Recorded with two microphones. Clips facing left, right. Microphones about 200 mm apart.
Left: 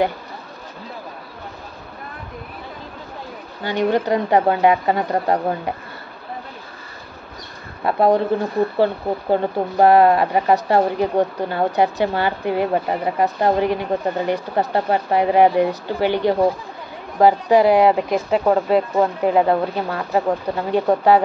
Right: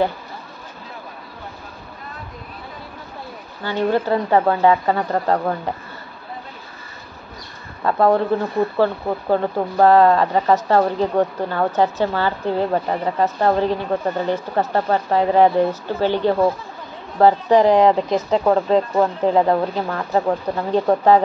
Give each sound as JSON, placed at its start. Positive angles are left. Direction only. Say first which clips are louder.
{"t": 3.6, "sound": "a woman's voice", "louder": "left 1 dB", "side_deg": 15}
{"t": 7.8, "sound": "a woman's voice", "louder": "even", "side_deg": 15}